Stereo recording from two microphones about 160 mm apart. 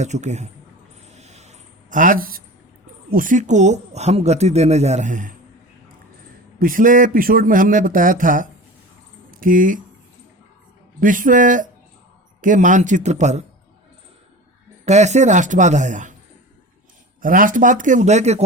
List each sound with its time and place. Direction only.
0.0 s speech: 45° right (ahead or behind)
1.1 s a sound: 45° right (ahead or behind); by 2.4 s 65° right (ahead or behind)
3.1 s speech: 55° right (ahead or behind)
6.6 s speech: 60° right (ahead or behind)
11.0 s speech: 55° right (ahead or behind)
14.8 s speech: 45° right (ahead or behind)
17.2 s speech: 60° right (ahead or behind)